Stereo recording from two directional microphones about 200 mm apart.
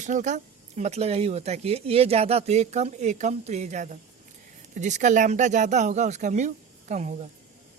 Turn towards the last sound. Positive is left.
turn(degrees=-35)  # may be behind; listen again after turning